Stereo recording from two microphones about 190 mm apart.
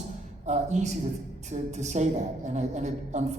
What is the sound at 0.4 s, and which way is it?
A woman's voice, 35° right (ahead or behind).